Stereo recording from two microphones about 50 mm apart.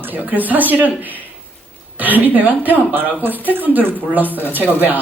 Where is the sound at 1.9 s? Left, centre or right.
Right.